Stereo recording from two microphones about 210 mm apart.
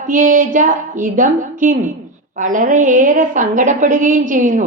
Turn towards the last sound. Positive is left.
turn(degrees=-40)  # may be behind; listen again after turning